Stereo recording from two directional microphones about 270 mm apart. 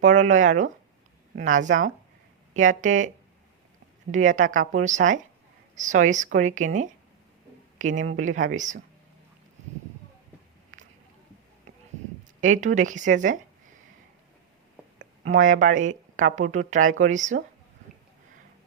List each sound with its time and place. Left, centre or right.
0.0 s speech: right
4.1 s speech: right
12.4 s speech: right
15.3 s speech: right